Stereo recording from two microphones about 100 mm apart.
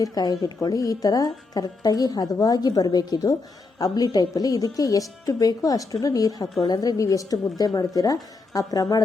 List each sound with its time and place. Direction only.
0.0 s speech: 40° left (ahead or behind)